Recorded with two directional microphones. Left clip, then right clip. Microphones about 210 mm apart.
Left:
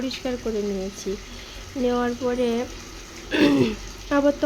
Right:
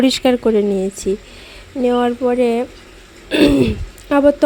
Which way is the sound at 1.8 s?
30° right (ahead or behind).